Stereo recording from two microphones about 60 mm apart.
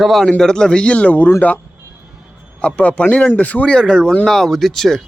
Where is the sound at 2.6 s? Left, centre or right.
Left; by 5.0 s centre.